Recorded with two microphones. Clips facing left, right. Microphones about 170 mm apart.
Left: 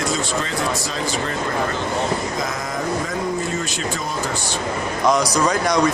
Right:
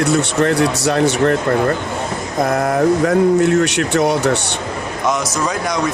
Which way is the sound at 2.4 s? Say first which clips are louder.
Right 10 dB; 60° right (ahead or behind).